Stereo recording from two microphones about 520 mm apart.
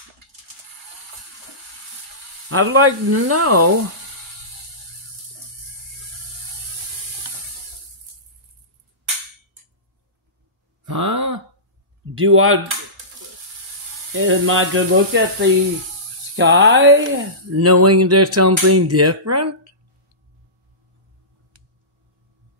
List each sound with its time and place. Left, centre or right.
2.5 s speech: right
10.9 s groan: right
12.2 s speech: right
14.1 s speech: right